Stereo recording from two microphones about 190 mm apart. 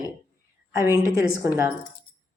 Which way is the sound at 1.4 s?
15° right (ahead or behind).